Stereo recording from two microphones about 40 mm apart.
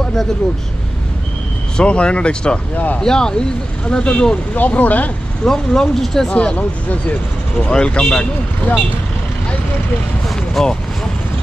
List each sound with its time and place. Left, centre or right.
0.0 s vehicle: centre
1.8 s speech: left
2.7 s speech: left
3.0 s speech: centre
3.8 s speech: left
4.6 s speech: left
5.4 s speech: centre
6.2 s speech: left
6.5 s speech: left
7.5 s speech: left
10.6 s speech: centre